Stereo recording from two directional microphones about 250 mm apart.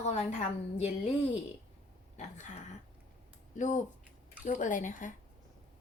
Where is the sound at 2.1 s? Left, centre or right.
Left.